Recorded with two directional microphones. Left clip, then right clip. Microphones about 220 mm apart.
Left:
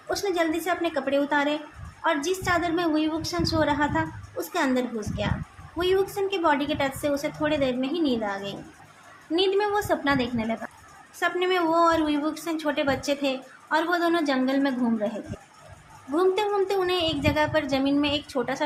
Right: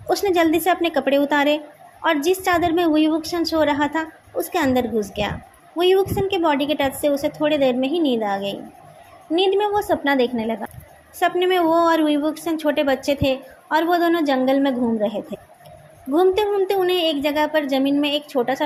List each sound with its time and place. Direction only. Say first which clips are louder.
0.1 s a woman's voice: right 8 dB; 30° right (ahead or behind)
16.1 s a woman's voice: right 5 dB; 20° right (ahead or behind)